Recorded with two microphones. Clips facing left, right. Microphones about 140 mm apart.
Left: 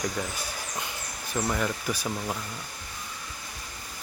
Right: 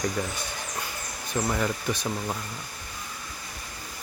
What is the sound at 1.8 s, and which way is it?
Speech, 5° left (ahead or behind).